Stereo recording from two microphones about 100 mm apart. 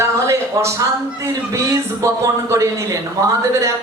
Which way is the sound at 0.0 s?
30° right (ahead or behind).